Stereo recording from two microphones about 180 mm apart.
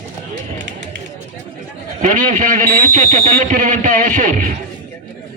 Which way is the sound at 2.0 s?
45° right (ahead or behind).